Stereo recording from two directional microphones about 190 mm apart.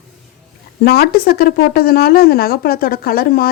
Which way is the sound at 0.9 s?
55° left (ahead or behind).